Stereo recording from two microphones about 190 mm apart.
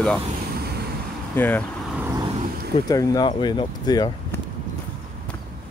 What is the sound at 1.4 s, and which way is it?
Speech, 10° left (ahead or behind).